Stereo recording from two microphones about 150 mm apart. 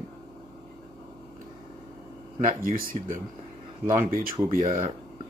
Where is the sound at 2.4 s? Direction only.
70° right (ahead or behind).